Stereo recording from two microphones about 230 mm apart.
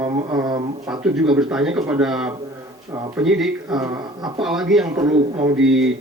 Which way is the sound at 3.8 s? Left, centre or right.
Centre.